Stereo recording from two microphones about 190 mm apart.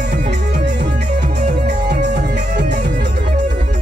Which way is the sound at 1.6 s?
60° right (ahead or behind).